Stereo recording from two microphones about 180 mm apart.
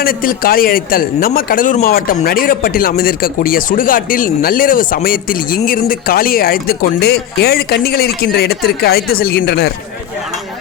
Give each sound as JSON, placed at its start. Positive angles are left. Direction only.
{"t": 0.0, "sound": "a man's voice", "side_deg": 50}